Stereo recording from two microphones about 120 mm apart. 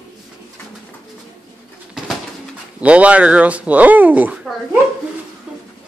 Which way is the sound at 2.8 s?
10° right (ahead or behind).